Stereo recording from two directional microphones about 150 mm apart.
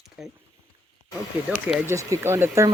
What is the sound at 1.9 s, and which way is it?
Speech, 20° right (ahead or behind).